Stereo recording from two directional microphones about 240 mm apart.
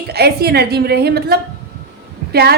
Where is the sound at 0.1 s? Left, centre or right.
Right.